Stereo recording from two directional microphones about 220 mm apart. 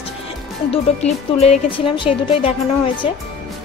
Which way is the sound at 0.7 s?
30° left (ahead or behind).